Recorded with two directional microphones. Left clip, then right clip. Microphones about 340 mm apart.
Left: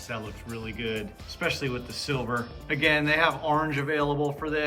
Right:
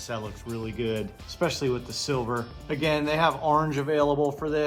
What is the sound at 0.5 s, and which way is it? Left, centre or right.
Speech, centre.